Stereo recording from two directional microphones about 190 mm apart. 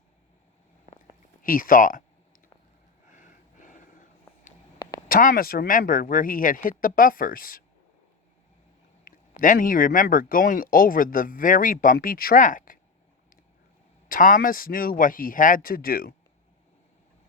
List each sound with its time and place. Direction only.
1.4 s speech: 45° left (ahead or behind)
3.1 s a sound: 40° left (ahead or behind)
5.0 s speech: 50° left (ahead or behind)
9.0 s speech: 45° left (ahead or behind)
14.1 s speech: 45° left (ahead or behind)